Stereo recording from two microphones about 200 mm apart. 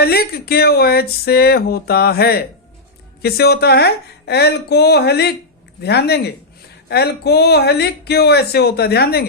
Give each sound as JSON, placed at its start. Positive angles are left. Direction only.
{"t": 0.0, "sound": "speech", "side_deg": 50}